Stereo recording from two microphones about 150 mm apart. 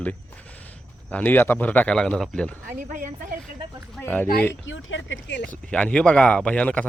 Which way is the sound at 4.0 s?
10° left (ahead or behind).